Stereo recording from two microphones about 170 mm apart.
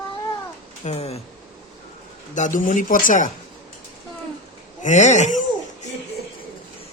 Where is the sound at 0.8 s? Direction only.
40° left (ahead or behind).